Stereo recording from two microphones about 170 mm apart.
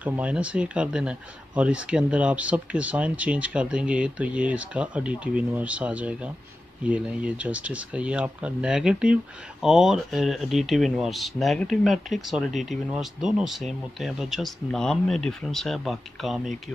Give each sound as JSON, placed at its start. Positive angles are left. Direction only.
{"t": 0.0, "sound": "speech", "side_deg": -10}